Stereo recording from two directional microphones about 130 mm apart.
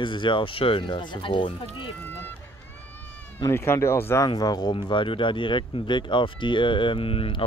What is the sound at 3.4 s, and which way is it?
Speech, 20° left (ahead or behind).